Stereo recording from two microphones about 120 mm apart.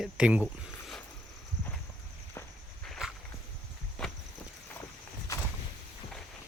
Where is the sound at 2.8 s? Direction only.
5° left (ahead or behind).